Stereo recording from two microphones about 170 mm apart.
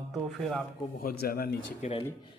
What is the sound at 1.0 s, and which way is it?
Speech, 60° left (ahead or behind).